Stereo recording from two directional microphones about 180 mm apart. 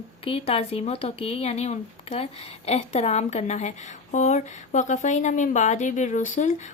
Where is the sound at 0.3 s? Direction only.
35° left (ahead or behind).